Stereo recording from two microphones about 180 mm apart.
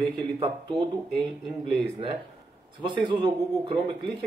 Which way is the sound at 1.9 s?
30° right (ahead or behind).